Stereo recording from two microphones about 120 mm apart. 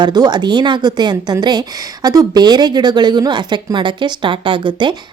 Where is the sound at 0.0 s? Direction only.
35° right (ahead or behind).